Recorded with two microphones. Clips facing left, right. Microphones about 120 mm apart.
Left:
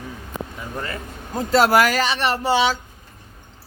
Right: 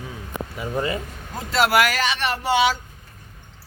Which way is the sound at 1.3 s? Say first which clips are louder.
Left 3 dB; 40° left (ahead or behind).